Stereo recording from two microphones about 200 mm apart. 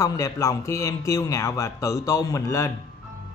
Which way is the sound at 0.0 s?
15° left (ahead or behind).